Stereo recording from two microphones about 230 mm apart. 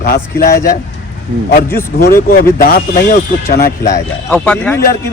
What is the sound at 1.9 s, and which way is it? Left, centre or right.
A man's voice, left.